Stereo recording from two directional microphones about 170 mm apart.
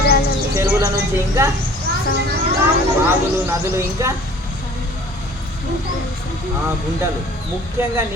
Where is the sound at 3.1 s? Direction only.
15° right (ahead or behind).